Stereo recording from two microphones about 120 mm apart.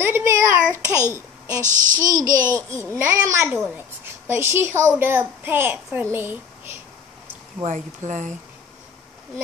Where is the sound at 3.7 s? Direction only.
20° right (ahead or behind).